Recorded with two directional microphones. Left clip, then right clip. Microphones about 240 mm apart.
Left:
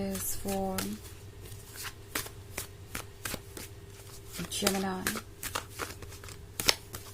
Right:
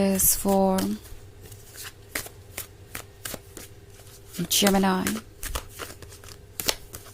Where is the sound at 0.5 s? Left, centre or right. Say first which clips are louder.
Right 12 dB; right.